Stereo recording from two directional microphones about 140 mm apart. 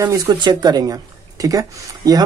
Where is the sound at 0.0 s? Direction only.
30° right (ahead or behind).